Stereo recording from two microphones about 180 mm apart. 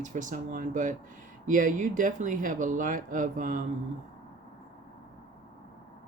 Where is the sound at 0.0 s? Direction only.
45° right (ahead or behind).